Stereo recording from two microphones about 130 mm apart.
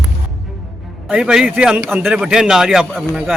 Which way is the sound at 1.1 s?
5° right (ahead or behind).